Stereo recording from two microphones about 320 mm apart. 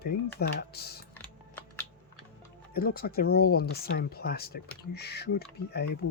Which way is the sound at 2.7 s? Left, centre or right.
Left.